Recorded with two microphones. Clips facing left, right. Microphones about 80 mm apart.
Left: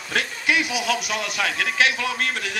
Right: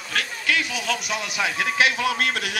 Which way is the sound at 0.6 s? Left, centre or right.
Centre.